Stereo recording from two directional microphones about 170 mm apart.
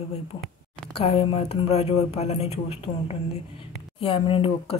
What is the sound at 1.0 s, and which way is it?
Speech, 35° left (ahead or behind).